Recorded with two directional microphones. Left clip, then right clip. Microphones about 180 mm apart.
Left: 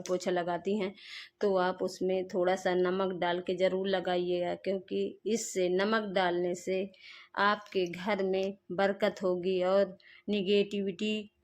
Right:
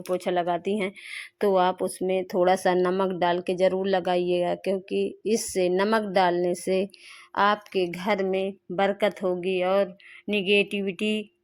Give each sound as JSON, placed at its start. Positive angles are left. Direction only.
{"t": 0.1, "sound": "a woman's voice", "side_deg": -15}